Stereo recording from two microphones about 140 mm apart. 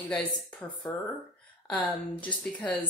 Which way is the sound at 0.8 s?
25° left (ahead or behind).